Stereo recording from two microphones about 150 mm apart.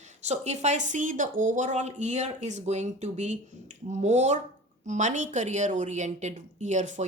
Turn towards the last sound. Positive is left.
turn(degrees=-55)  # may be behind; listen again after turning